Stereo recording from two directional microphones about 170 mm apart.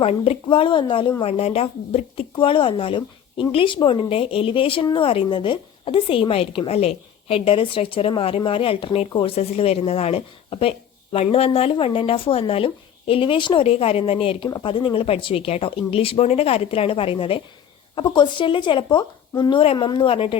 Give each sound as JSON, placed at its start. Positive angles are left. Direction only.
{"t": 0.0, "sound": "speech", "side_deg": 35}